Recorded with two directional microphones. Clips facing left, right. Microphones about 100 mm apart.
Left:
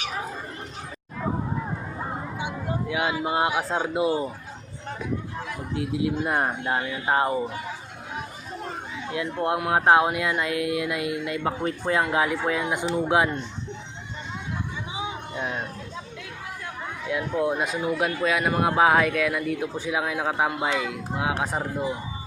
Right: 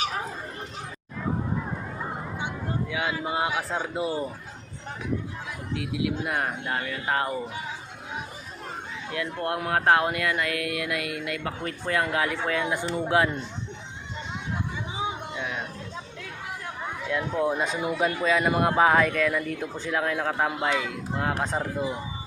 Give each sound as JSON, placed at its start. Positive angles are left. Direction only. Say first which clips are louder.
{"t": 2.4, "sound": "speech", "louder": "left 1 dB", "side_deg": 15}
{"t": 5.7, "sound": "speech", "louder": "left 3 dB", "side_deg": 30}
{"t": 9.1, "sound": "speech", "louder": "left 3 dB", "side_deg": 20}
{"t": 12.8, "sound": "speech", "louder": "left 3 dB", "side_deg": 5}
{"t": 13.1, "sound": "speech", "louder": "even", "side_deg": 20}
{"t": 15.4, "sound": "speech", "louder": "left 6 dB", "side_deg": 35}
{"t": 17.1, "sound": "speech", "louder": "left 1 dB", "side_deg": 5}
{"t": 17.7, "sound": "speech", "louder": "left 2 dB", "side_deg": -5}
{"t": 18.0, "sound": "speech", "louder": "right 2 dB", "side_deg": 5}